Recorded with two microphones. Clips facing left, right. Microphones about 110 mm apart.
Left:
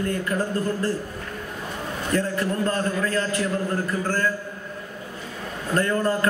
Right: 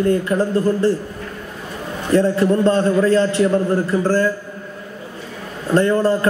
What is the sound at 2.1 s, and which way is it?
A man's voice, 30° right (ahead or behind).